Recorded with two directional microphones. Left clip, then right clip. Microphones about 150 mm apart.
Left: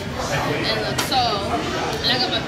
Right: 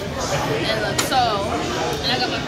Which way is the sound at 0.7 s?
15° right (ahead or behind).